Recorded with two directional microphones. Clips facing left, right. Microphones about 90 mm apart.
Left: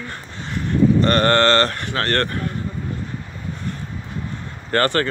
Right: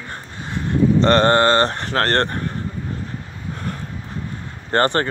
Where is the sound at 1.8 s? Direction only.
40° right (ahead or behind).